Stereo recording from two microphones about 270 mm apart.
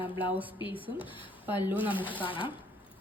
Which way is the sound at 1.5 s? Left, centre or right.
Centre.